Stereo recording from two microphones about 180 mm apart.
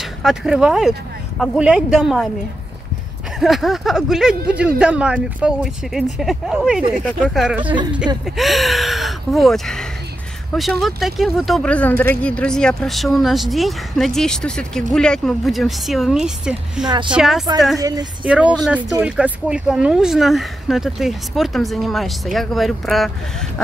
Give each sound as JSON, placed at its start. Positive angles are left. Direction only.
{"t": 0.2, "sound": "speech", "side_deg": 0}
{"t": 3.3, "sound": "speech", "side_deg": 0}
{"t": 7.6, "sound": "a woman's voice", "side_deg": -25}
{"t": 8.4, "sound": "speech", "side_deg": 0}
{"t": 17.7, "sound": "a woman's voice", "side_deg": -20}
{"t": 18.2, "sound": "speech", "side_deg": -5}